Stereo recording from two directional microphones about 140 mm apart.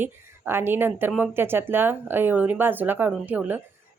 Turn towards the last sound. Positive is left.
turn(degrees=-15)  # may be behind; listen again after turning